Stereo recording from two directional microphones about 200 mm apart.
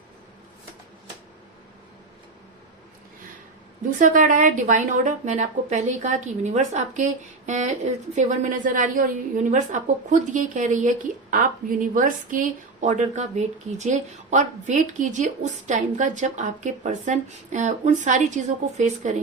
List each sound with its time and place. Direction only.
3.9 s a woman's voice: 40° right (ahead or behind)